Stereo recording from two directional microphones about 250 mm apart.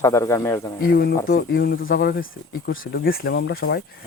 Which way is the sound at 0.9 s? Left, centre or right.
Left.